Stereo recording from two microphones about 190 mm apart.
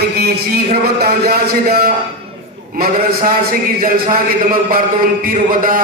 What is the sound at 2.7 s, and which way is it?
Mantra, 50° right (ahead or behind).